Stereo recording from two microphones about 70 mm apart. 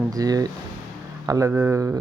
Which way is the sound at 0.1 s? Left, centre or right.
Right.